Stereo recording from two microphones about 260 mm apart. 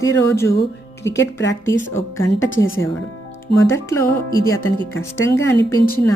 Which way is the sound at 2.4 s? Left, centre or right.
Left.